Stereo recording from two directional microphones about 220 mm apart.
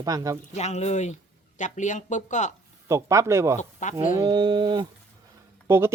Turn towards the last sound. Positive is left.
turn(degrees=-10)  # may be behind; listen again after turning